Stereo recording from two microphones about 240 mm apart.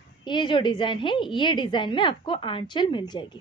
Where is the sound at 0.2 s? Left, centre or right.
Centre.